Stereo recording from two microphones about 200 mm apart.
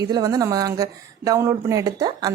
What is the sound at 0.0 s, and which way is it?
Speech, 15° right (ahead or behind).